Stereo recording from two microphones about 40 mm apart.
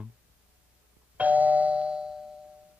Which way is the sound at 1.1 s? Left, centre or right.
Right.